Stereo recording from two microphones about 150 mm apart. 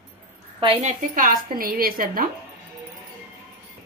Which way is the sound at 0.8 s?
65° right (ahead or behind).